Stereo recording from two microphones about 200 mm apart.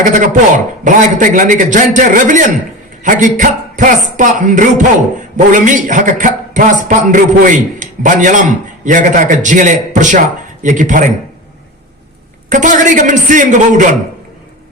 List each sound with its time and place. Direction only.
0.0 s a man's voice: 40° right (ahead or behind)
12.5 s a man's voice: 40° right (ahead or behind)